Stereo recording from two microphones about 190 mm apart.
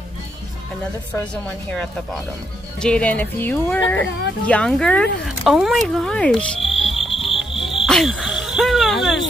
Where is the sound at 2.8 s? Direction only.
5° left (ahead or behind).